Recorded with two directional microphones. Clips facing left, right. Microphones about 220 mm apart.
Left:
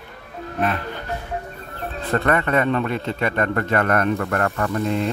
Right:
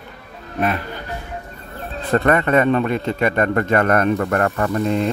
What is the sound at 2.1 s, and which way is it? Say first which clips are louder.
A man's voice: right 4 dB; 20° right (ahead or behind).